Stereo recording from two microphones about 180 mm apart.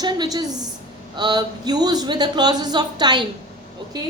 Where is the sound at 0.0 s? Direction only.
25° right (ahead or behind).